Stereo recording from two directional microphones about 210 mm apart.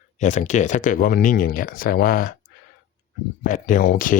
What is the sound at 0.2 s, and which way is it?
Speech, 35° left (ahead or behind).